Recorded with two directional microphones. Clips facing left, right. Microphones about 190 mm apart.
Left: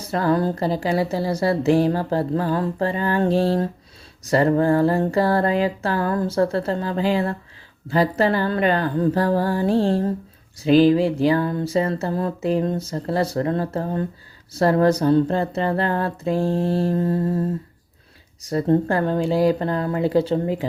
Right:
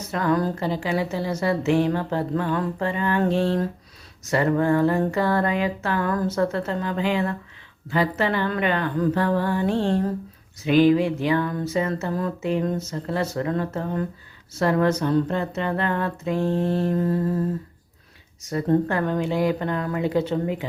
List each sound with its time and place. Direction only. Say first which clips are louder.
0.0 s a woman's voice: left 2 dB; 35° left (ahead or behind)
18.4 s a woman's voice: left 2 dB; 35° left (ahead or behind)